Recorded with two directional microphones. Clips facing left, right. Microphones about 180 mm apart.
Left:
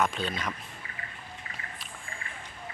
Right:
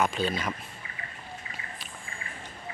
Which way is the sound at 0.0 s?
Centre (ahead or behind).